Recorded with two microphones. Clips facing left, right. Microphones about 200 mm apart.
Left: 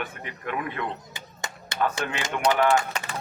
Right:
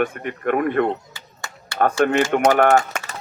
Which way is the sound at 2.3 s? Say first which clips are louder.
Right 2 dB; 50° right (ahead or behind).